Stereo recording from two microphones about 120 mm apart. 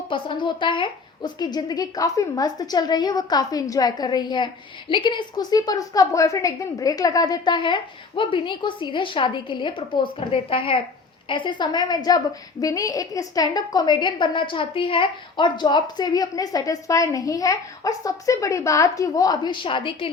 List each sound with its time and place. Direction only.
0.1 s a woman's voice: 40° left (ahead or behind)